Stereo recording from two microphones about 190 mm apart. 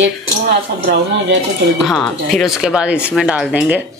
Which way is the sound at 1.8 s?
Centre (ahead or behind).